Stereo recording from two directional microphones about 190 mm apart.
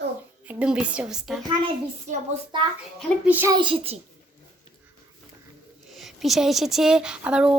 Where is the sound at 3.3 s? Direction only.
10° right (ahead or behind).